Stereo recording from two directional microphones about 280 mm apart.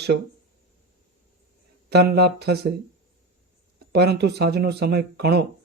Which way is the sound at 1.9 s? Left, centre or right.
Right.